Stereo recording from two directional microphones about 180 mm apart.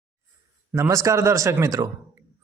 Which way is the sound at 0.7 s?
15° right (ahead or behind).